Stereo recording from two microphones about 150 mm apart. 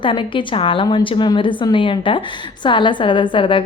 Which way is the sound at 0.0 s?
35° left (ahead or behind).